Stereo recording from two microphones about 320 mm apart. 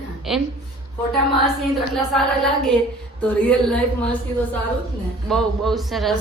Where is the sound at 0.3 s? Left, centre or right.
Centre.